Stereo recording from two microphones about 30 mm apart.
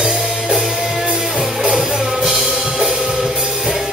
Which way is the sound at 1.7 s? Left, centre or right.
Right.